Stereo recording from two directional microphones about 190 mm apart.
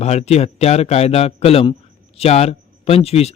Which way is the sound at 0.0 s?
35° left (ahead or behind).